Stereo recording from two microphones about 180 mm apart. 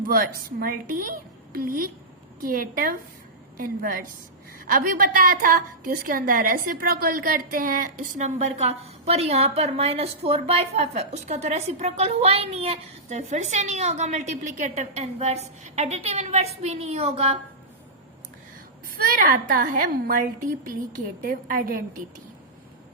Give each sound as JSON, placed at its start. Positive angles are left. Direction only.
{"t": 0.0, "sound": "a woman's voice", "side_deg": -55}
{"t": 19.0, "sound": "a woman's voice", "side_deg": -50}